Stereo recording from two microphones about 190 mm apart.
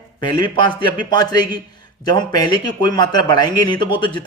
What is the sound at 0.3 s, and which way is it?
Speech, 25° left (ahead or behind).